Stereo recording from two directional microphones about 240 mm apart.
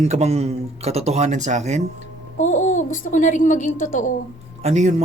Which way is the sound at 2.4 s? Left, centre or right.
Left.